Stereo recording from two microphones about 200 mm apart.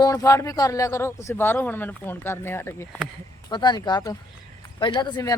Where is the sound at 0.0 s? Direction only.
15° left (ahead or behind).